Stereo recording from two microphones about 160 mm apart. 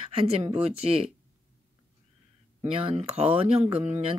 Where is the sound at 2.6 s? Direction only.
35° right (ahead or behind).